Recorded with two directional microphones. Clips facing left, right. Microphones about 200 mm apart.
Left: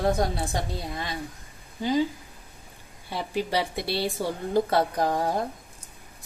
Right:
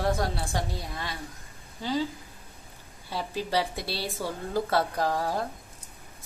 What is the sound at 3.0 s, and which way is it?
A woman's voice, 15° left (ahead or behind).